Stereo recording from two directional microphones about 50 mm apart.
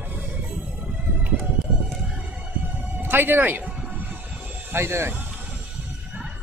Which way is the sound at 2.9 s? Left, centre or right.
Right.